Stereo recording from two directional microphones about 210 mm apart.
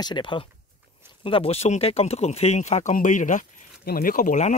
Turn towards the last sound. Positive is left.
turn(degrees=40)  # may be behind; listen again after turning